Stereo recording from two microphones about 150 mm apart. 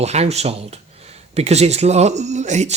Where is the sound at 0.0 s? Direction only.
45° right (ahead or behind).